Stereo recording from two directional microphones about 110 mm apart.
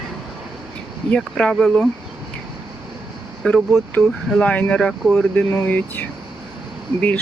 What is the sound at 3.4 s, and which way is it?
Speech, 10° left (ahead or behind).